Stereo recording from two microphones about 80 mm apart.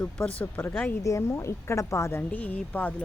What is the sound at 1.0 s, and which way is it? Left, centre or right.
A woman's voice, left.